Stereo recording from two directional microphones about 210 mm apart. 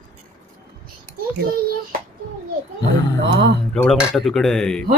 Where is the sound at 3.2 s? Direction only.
55° right (ahead or behind).